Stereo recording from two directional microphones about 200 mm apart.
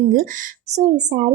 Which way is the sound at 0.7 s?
35° right (ahead or behind).